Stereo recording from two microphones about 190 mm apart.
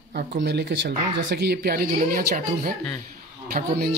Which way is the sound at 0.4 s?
60° right (ahead or behind).